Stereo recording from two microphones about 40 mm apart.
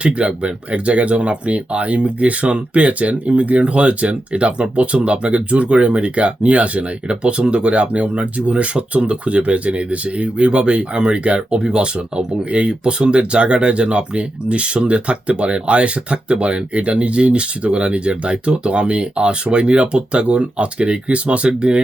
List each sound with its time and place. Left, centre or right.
0.0 s speech: right